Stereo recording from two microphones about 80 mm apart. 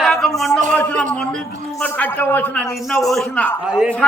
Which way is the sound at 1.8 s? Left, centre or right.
Left.